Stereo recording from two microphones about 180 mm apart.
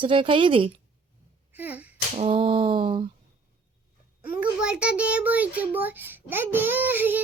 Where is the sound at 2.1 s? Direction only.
30° right (ahead or behind).